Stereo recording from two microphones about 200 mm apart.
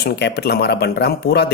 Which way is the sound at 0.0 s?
55° left (ahead or behind).